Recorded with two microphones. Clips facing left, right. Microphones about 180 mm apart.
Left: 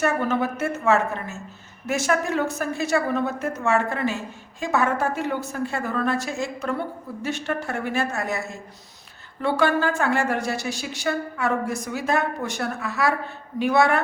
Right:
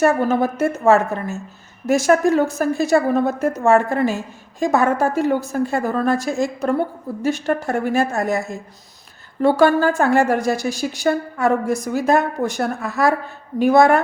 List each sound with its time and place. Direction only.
0.0 s a woman's voice: 40° right (ahead or behind)